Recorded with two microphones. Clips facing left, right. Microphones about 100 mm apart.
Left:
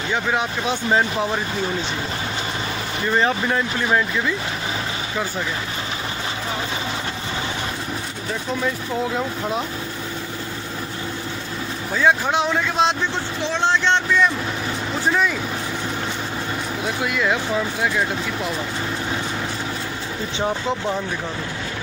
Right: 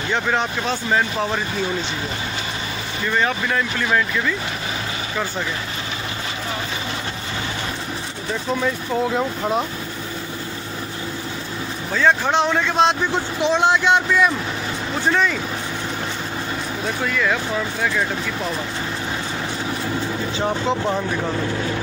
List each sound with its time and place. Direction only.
0.1 s speech: 5° left (ahead or behind)
3.1 s speech: 25° left (ahead or behind)
9.1 s speech: centre (ahead or behind)
11.9 s speech: 10° left (ahead or behind)
13.1 s a man's voice: 15° right (ahead or behind)
15.0 s speech: 5° left (ahead or behind)
16.8 s speech: 15° left (ahead or behind)